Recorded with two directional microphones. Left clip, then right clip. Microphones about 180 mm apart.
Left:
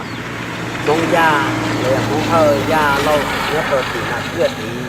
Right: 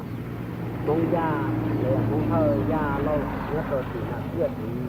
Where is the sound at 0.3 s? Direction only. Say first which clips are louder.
Left 12 dB; 75° left (ahead or behind).